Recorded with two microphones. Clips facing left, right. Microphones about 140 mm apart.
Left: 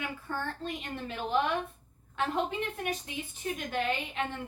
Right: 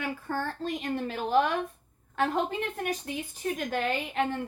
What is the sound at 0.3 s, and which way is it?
A child's voice, 40° right (ahead or behind).